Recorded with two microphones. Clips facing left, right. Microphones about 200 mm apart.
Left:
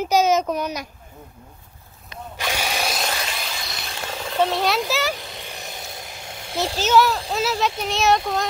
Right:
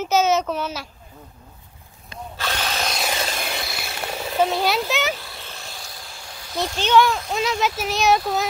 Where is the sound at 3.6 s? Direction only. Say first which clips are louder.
Right 2 dB; 5° right (ahead or behind).